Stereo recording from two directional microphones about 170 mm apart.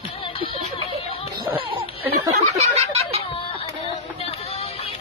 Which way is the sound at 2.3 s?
40° right (ahead or behind).